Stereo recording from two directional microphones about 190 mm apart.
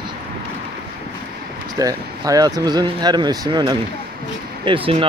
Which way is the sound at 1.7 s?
20° right (ahead or behind).